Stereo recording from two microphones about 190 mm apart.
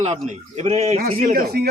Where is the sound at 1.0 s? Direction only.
50° right (ahead or behind).